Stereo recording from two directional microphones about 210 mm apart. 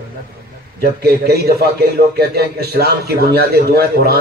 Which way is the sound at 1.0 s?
50° right (ahead or behind).